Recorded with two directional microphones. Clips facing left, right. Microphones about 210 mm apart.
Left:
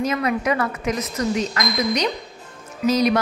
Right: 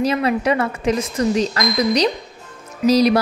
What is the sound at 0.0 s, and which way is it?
A woman's voice, 30° right (ahead or behind).